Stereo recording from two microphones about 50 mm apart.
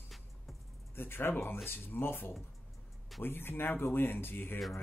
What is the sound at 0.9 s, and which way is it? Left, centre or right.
Speech, left.